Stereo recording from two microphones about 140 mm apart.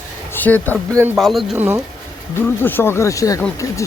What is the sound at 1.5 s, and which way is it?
Speech, 15° right (ahead or behind).